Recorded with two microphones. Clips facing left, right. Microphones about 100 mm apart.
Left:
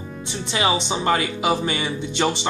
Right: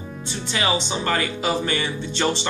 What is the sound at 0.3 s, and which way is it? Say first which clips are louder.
Speech: left 2 dB; 20° left (ahead or behind).